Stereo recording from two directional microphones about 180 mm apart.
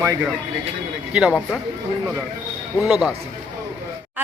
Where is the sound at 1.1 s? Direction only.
5° right (ahead or behind).